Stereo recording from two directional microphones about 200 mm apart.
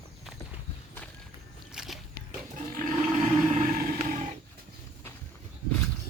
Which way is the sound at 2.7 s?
40° right (ahead or behind).